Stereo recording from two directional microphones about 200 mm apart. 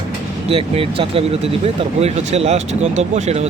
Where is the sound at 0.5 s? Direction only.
30° right (ahead or behind).